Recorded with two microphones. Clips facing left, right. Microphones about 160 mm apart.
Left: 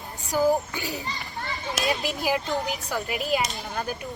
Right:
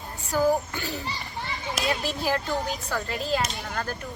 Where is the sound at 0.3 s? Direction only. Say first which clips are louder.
Left 1 dB; 15° left (ahead or behind).